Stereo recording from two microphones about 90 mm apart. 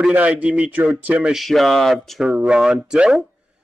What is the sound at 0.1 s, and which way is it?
A man's voice, 15° right (ahead or behind).